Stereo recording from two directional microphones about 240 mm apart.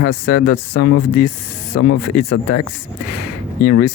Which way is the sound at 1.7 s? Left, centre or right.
Left.